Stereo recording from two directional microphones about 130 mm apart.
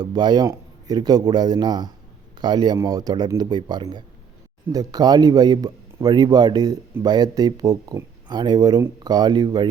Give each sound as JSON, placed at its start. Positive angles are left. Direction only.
{"t": 0.0, "sound": "a man's voice", "side_deg": -30}